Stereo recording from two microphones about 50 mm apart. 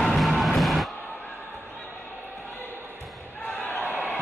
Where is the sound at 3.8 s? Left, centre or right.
Right.